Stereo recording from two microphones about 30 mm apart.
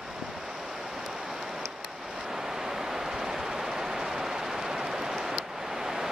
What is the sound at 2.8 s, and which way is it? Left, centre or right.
Vehicle, centre.